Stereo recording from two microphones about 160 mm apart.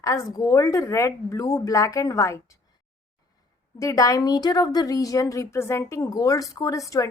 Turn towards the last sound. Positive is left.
turn(degrees=20)  # may be behind; listen again after turning